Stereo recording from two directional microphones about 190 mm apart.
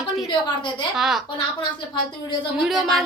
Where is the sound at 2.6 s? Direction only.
Centre (ahead or behind).